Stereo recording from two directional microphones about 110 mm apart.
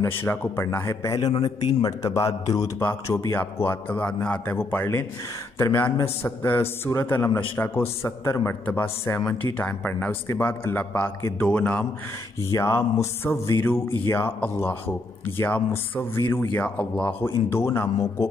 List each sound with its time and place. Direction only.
0.0 s a man's voice: 20° left (ahead or behind)
2.8 s a man's voice: 15° left (ahead or behind)
17.5 s speech: 25° left (ahead or behind)